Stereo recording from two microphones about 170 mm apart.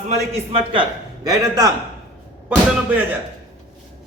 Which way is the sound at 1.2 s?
20° right (ahead or behind).